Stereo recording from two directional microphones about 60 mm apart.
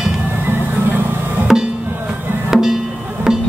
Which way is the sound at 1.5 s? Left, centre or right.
Centre.